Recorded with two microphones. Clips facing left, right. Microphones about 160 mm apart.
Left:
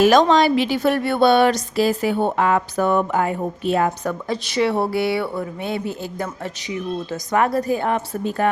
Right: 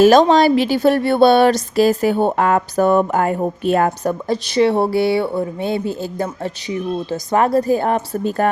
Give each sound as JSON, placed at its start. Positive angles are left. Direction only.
{"t": 0.0, "sound": "speech", "side_deg": -35}
{"t": 4.3, "sound": "speech", "side_deg": -30}